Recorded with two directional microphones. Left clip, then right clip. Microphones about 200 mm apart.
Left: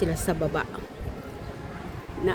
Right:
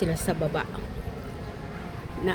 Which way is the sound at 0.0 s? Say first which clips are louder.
Left 1 dB; 10° left (ahead or behind).